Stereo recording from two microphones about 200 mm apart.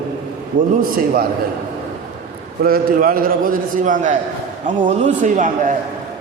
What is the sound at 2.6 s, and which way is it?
A man's voice, 45° right (ahead or behind).